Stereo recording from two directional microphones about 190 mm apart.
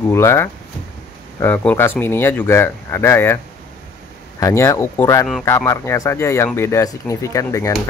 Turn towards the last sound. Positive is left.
turn(degrees=15)  # may be behind; listen again after turning